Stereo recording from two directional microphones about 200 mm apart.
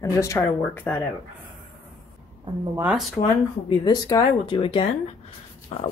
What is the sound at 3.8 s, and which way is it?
Speech, 20° left (ahead or behind).